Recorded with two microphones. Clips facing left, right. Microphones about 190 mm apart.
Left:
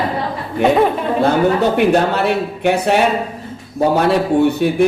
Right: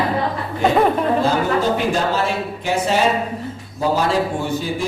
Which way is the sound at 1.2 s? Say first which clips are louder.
Left 4 dB; 65° left (ahead or behind).